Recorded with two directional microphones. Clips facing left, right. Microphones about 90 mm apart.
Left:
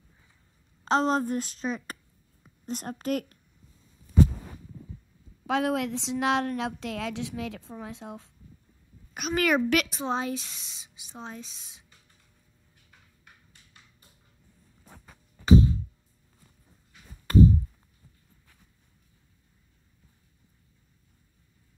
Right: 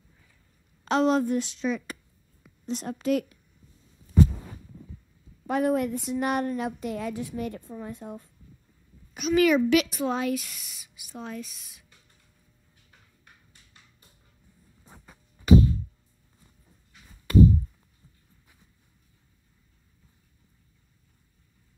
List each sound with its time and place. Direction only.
0.8 s a woman's voice: 35° left (ahead or behind)
4.3 s a sound: 5° right (ahead or behind)
5.5 s a woman's voice: 90° left
9.1 s a child's voice: 50° left (ahead or behind)
9.8 s speech: 25° left (ahead or behind)
14.9 s music: 5° right (ahead or behind)
17.3 s chop: 35° left (ahead or behind)